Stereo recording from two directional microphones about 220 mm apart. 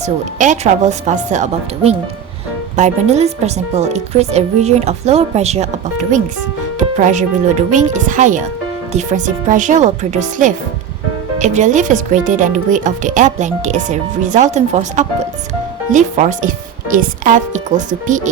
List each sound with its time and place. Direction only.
0.0 s speech: 30° right (ahead or behind)